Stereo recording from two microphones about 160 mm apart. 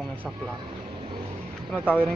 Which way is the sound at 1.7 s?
10° left (ahead or behind).